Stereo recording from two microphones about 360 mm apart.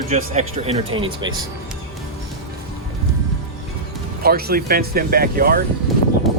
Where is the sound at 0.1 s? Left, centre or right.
Centre.